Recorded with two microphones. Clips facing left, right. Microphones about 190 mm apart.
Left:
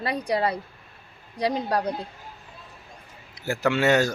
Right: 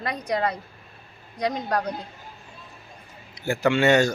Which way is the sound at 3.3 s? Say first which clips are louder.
Right 2 dB; 5° left (ahead or behind).